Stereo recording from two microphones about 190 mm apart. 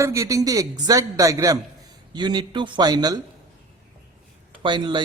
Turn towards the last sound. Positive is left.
turn(degrees=-25)  # may be behind; listen again after turning